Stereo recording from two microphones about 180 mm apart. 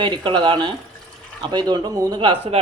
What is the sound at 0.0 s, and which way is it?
Speech, 25° right (ahead or behind).